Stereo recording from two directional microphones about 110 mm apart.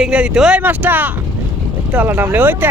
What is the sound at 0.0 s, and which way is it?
Speech, 10° right (ahead or behind).